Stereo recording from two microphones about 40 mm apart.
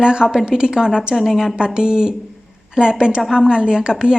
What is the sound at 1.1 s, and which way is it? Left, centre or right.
A woman's voice, centre.